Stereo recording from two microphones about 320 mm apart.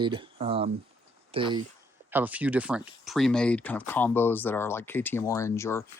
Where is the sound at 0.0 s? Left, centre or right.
Centre.